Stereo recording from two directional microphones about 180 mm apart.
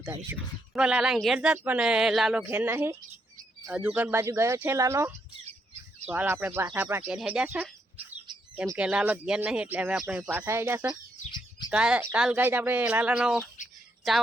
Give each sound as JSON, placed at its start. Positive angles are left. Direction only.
{"t": 0.7, "sound": "speech", "side_deg": -5}
{"t": 7.1, "sound": "speech", "side_deg": -5}